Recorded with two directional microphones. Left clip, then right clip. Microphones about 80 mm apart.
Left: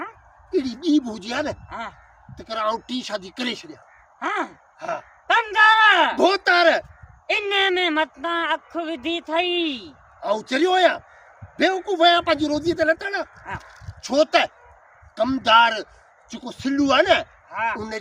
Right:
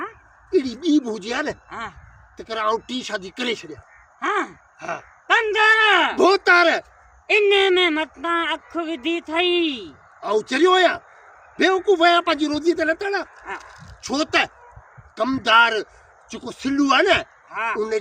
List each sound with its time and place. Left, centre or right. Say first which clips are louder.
0.5 s speech: right 2 dB; left
13.6 s a sound: right 2 dB; centre
14.0 s speech: left 3 dB; left